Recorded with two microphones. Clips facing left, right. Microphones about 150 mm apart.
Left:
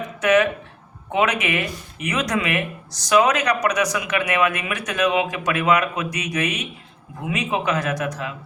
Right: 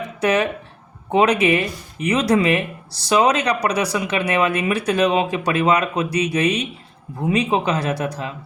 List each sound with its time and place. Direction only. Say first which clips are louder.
0.2 s speech: left 1 dB; 30° right (ahead or behind)